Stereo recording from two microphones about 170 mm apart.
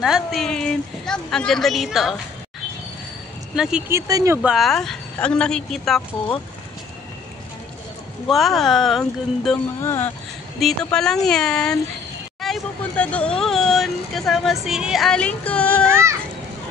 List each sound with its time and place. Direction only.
0.0 s a woman's voice: centre (ahead or behind)
3.5 s a woman's voice: 5° right (ahead or behind)
3.9 s speech: 15° right (ahead or behind)
4.4 s a woman's voice: centre (ahead or behind)
8.3 s a woman's voice: centre (ahead or behind)
9.8 s speech: 15° left (ahead or behind)
10.6 s a woman's voice: 5° left (ahead or behind)
15.9 s speech: 15° right (ahead or behind)